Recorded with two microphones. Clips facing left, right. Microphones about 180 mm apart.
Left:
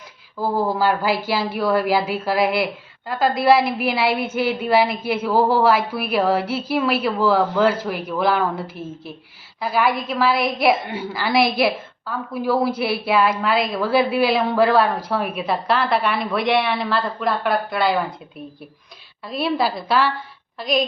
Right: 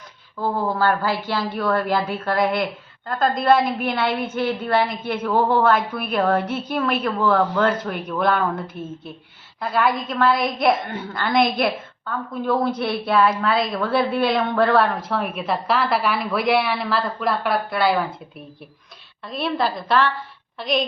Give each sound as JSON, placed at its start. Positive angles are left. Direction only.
{"t": 0.3, "sound": "a woman's voice", "side_deg": 10}
{"t": 19.2, "sound": "a woman's voice", "side_deg": 5}